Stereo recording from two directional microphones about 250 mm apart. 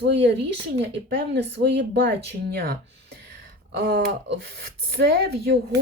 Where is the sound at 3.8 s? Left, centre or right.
Right.